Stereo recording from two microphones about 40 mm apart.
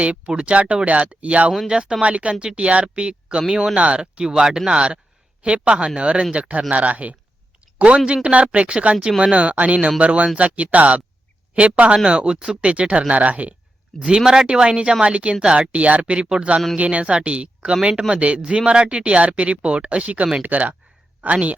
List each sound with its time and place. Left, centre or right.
0.0 s speech: right
4.0 s speech: centre
5.4 s speech: right
7.8 s speech: right
12.6 s speech: right
13.9 s speech: centre
14.4 s speech: right